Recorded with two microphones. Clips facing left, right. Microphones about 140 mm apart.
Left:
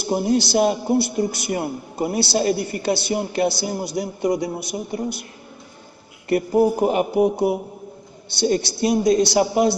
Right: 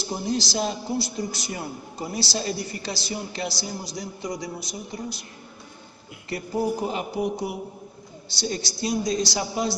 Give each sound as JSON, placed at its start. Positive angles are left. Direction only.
{"t": 0.0, "sound": "a man's voice", "side_deg": 60}
{"t": 6.2, "sound": "a man's voice", "side_deg": 55}